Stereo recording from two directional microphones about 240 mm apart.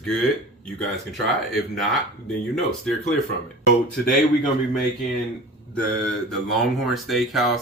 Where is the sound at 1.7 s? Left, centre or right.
Centre.